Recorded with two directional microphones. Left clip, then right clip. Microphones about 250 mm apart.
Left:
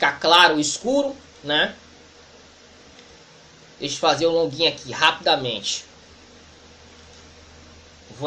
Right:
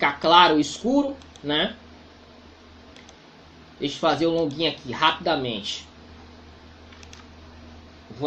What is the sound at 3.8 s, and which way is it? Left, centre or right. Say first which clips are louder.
Speech: left 3 dB; right.